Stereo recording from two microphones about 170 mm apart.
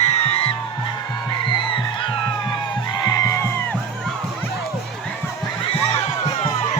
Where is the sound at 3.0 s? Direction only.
20° left (ahead or behind).